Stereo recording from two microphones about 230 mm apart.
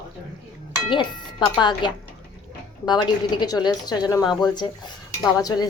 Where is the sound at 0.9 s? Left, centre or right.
Centre.